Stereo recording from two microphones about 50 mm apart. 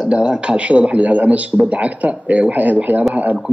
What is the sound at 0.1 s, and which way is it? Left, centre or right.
A man's voice, centre.